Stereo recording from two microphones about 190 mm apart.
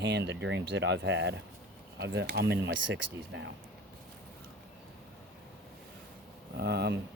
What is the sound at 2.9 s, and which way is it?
Speech, 75° right (ahead or behind).